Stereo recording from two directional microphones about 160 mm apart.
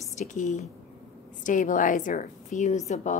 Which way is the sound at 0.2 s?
50° left (ahead or behind).